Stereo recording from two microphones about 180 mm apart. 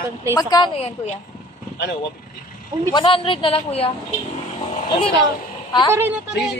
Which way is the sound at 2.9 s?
25° left (ahead or behind).